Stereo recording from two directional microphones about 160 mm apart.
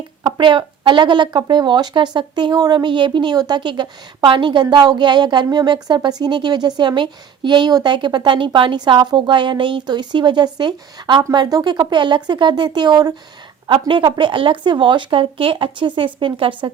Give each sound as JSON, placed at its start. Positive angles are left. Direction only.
{"t": 0.2, "sound": "speech", "side_deg": -30}